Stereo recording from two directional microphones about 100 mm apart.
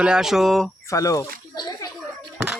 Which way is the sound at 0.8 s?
35° left (ahead or behind).